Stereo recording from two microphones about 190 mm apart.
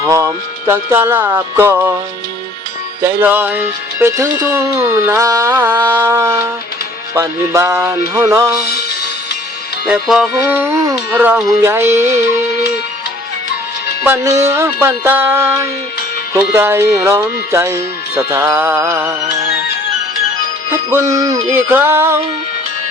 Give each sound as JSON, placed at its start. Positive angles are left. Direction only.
{"t": 0.0, "sound": "music", "side_deg": -15}
{"t": 0.7, "sound": "speech", "side_deg": -15}
{"t": 3.0, "sound": "speech", "side_deg": -10}
{"t": 9.8, "sound": "speech", "side_deg": -5}
{"t": 14.0, "sound": "speech", "side_deg": -15}
{"t": 20.7, "sound": "music", "side_deg": -15}
{"t": 21.5, "sound": "speech", "side_deg": -10}